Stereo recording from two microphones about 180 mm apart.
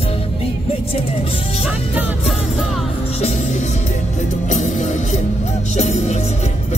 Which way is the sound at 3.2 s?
40° left (ahead or behind).